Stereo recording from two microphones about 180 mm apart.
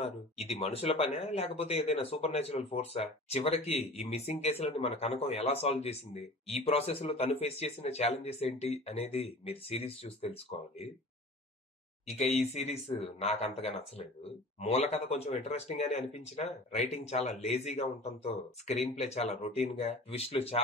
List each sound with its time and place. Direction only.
0.5 s speech: 35° left (ahead or behind)
12.2 s speech: 35° left (ahead or behind)